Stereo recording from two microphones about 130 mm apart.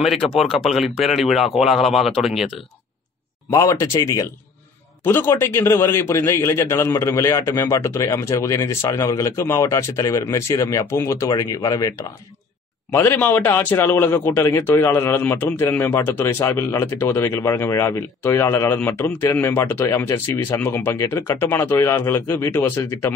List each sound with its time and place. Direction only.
0.0 s speech: centre (ahead or behind)
3.4 s a man's voice: 25° left (ahead or behind)
12.9 s a man's voice: 15° left (ahead or behind)